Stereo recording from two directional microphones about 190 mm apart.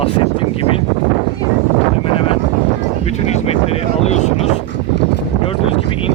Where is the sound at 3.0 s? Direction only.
35° left (ahead or behind).